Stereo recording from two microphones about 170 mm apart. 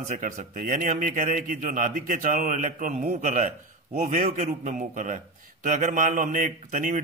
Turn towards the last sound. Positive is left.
turn(degrees=-50)  # may be behind; listen again after turning